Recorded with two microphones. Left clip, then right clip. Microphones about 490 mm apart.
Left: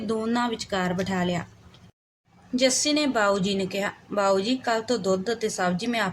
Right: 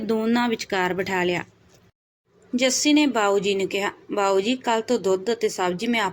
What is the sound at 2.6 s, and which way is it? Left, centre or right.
A woman's voice, left.